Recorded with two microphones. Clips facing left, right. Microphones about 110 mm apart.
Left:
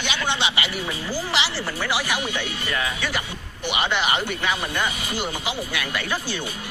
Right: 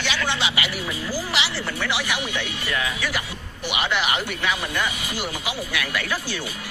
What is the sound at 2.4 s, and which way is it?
Speech, centre (ahead or behind).